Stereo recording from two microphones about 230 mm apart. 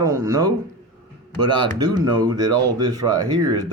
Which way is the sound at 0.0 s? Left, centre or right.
Centre.